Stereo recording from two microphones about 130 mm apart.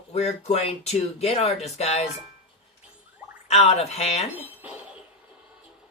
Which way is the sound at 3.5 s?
55° left (ahead or behind).